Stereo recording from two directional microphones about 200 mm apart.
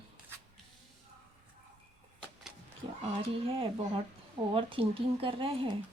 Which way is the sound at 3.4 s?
25° right (ahead or behind).